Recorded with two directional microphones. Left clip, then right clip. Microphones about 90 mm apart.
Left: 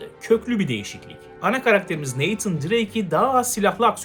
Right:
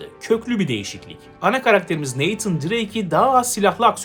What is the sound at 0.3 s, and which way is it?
Speech, 25° right (ahead or behind).